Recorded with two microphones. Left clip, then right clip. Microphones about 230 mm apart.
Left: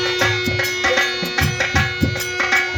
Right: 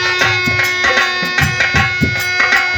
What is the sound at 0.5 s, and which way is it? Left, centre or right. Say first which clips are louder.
Music: right 5 dB; right.